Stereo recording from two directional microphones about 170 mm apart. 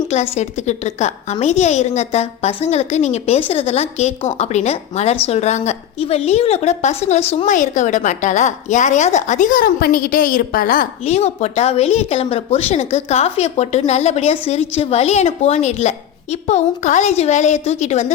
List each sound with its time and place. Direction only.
0.1 s a woman's voice: 40° left (ahead or behind)
11.0 s speech: 40° left (ahead or behind)